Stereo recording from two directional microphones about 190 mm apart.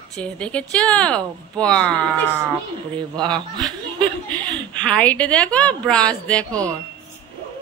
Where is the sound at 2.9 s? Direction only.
20° right (ahead or behind).